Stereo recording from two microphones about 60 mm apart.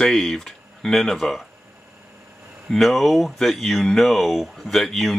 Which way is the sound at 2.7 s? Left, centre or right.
Centre.